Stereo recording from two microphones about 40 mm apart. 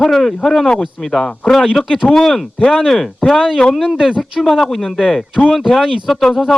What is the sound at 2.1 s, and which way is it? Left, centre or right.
Speech, centre.